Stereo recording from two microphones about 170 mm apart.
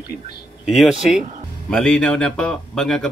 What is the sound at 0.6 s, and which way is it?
Speech, centre (ahead or behind).